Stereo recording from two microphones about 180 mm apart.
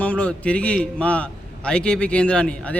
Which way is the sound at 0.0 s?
5° left (ahead or behind).